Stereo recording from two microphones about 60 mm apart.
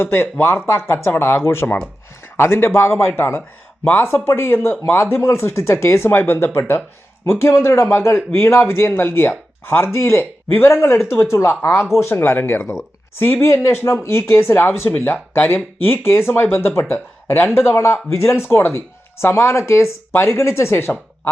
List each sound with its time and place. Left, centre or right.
0.0 s speech: left
6.1 s speech: left